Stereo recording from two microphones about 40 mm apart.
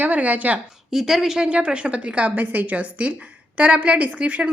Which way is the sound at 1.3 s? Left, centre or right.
Right.